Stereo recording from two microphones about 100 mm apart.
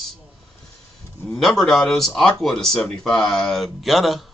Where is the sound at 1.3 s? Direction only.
5° left (ahead or behind).